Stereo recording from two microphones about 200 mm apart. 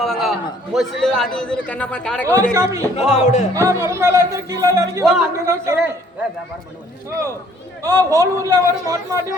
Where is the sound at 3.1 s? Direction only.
35° left (ahead or behind).